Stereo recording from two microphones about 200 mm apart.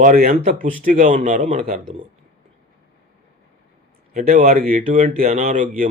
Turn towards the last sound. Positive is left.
turn(degrees=-45)  # may be behind; listen again after turning